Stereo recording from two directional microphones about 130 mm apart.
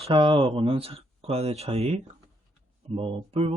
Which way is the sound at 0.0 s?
40° right (ahead or behind).